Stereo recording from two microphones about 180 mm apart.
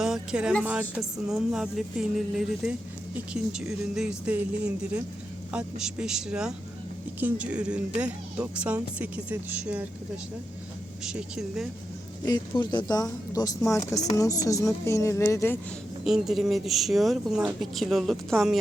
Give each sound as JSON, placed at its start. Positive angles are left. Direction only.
{"t": 0.0, "sound": "speech", "side_deg": -5}
{"t": 11.0, "sound": "speech", "side_deg": -5}
{"t": 12.2, "sound": "a woman's voice", "side_deg": 25}
{"t": 16.0, "sound": "speech", "side_deg": 0}